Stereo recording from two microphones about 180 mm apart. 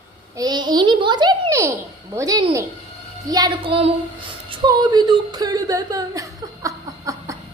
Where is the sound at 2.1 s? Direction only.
20° right (ahead or behind).